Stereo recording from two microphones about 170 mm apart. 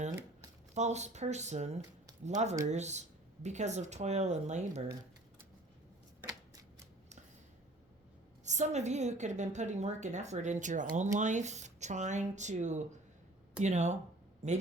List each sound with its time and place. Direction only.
0.7 s a woman's voice: 40° right (ahead or behind)
8.4 s a woman's voice: 45° right (ahead or behind)